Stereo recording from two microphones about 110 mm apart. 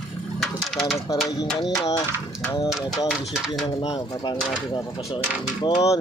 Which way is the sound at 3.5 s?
45° left (ahead or behind).